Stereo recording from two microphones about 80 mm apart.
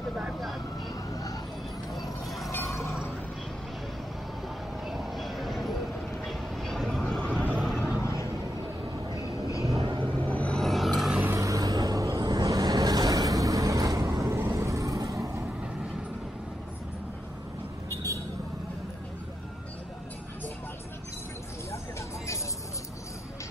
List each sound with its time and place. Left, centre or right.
1.1 s vehicle: left
2.0 s vehicle: centre
2.5 s a sound: left
4.8 s vehicle: centre
9.1 s train: left
9.8 s train: right
10.2 s vehicle: centre
10.6 s vehicle: centre
11.3 s vehicle: right